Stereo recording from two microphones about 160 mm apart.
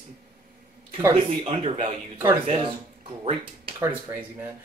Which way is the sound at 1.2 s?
40° right (ahead or behind).